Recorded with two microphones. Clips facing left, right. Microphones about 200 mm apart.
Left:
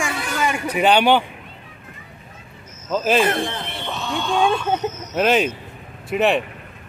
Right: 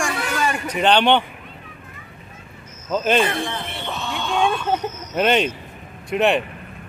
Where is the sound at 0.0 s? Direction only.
10° left (ahead or behind).